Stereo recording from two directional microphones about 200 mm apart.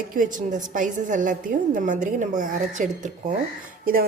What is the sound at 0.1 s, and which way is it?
A woman's voice, 40° right (ahead or behind).